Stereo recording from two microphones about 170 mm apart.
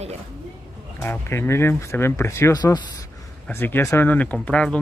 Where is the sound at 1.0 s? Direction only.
15° left (ahead or behind).